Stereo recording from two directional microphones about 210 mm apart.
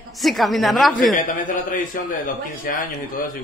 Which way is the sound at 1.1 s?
40° left (ahead or behind).